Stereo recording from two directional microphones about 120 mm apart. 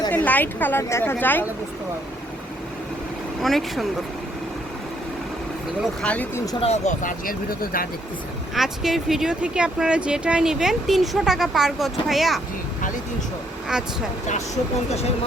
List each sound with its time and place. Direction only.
0.1 s a woman's voice: 15° left (ahead or behind)
3.4 s speech: centre (ahead or behind)
5.8 s speech: 10° left (ahead or behind)
6.3 s speech: 30° left (ahead or behind)
6.6 s speech: 70° left (ahead or behind)
8.5 s speech: 5° right (ahead or behind)